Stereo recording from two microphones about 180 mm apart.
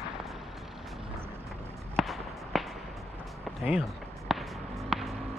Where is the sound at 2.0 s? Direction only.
Centre (ahead or behind).